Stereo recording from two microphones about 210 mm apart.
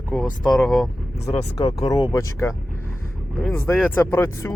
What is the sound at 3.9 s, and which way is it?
Speech, 10° left (ahead or behind).